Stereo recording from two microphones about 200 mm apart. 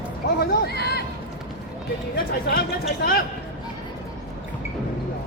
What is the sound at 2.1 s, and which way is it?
Speech, 50° left (ahead or behind).